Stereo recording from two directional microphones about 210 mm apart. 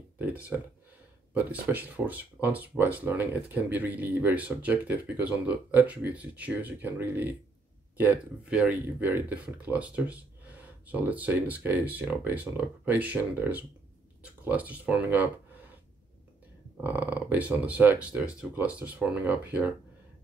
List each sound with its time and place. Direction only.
1.3 s speech: 5° right (ahead or behind)
16.8 s speech: 10° right (ahead or behind)